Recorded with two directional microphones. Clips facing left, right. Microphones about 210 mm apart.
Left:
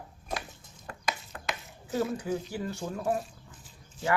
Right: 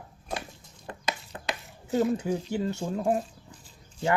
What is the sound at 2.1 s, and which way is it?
Speech, 25° right (ahead or behind).